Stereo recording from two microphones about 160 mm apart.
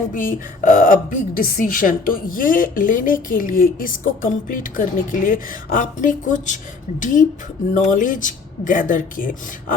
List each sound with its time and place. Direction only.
0.1 s a woman's voice: 55° left (ahead or behind)